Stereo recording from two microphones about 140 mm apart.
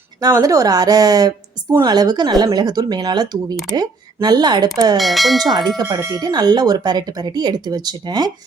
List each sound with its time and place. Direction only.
0.2 s speech: 25° right (ahead or behind)
4.9 s speech: centre (ahead or behind)
5.5 s speech: 25° right (ahead or behind)